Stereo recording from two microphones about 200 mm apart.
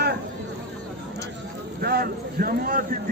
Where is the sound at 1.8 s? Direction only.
50° right (ahead or behind).